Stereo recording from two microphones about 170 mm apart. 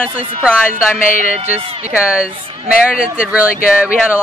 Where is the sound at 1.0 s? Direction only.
50° left (ahead or behind).